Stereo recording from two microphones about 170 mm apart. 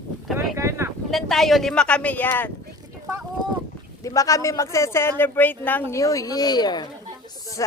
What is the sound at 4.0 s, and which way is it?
Speech, 20° left (ahead or behind).